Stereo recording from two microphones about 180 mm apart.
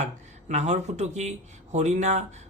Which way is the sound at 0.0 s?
40° right (ahead or behind).